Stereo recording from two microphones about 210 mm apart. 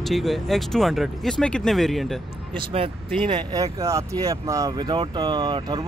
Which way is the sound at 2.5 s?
25° right (ahead or behind).